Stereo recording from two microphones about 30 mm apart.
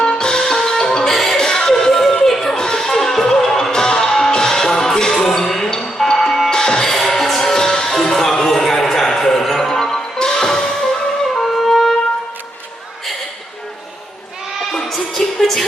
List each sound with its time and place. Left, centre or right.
0.0 s music: left; by 2.5 s centre
2.5 s music: left
11.4 s music: centre
14.7 s music: centre